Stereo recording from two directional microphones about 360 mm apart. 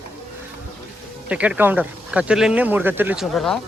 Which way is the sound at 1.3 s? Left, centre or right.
Centre.